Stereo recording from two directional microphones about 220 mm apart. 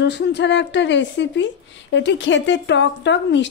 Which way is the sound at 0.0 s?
50° left (ahead or behind).